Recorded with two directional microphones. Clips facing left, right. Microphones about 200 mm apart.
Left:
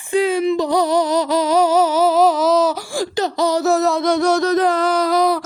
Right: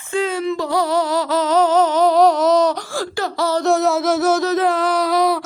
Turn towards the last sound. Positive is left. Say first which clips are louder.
# left 1 dB
turn(degrees=0)  # may be behind; listen again after turning